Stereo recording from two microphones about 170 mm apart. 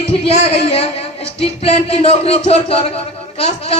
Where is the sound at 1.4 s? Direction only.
35° left (ahead or behind).